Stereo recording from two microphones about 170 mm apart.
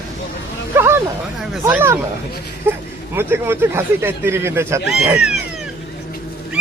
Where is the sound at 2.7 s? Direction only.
15° right (ahead or behind).